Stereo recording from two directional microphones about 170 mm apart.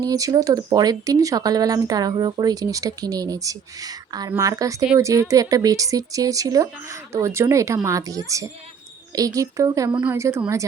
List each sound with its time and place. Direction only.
0.0 s speech: 20° right (ahead or behind)